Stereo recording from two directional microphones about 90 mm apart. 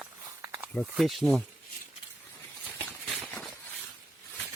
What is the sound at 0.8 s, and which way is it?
Speech, centre (ahead or behind).